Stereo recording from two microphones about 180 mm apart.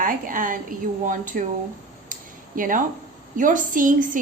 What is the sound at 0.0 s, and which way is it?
A woman's voice, 50° right (ahead or behind).